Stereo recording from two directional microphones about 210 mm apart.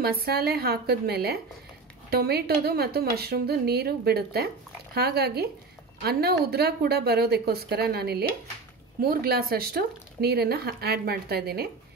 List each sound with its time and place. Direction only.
0.0 s speech: 45° right (ahead or behind)